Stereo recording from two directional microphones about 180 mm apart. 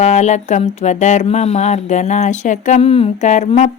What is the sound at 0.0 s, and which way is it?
Speech, 40° left (ahead or behind).